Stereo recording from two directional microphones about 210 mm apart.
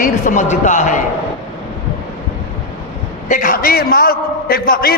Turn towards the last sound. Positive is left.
turn(degrees=45)  # may be behind; listen again after turning